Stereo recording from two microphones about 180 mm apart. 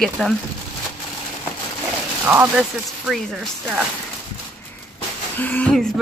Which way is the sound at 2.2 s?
15° right (ahead or behind).